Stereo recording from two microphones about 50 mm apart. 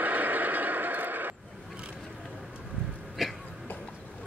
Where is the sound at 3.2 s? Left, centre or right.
Centre.